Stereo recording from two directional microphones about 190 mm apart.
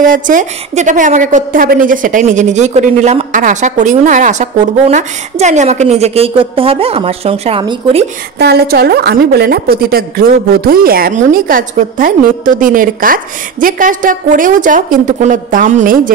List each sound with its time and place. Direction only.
0.0 s a woman's voice: 45° right (ahead or behind)
8.4 s a woman's voice: 60° right (ahead or behind)